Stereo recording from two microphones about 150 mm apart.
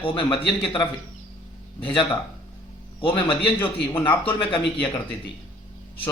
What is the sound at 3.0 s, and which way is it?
A man's voice, 35° left (ahead or behind).